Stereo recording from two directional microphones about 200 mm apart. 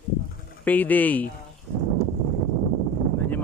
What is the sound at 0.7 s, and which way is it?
Speech, 10° left (ahead or behind).